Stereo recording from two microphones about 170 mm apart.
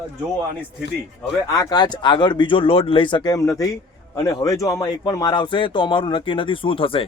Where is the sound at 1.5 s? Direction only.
25° left (ahead or behind).